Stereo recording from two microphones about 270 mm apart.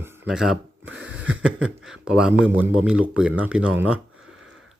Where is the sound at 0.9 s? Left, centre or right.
Right.